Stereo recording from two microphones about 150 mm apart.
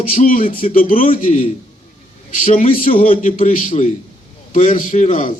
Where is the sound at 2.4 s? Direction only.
55° left (ahead or behind).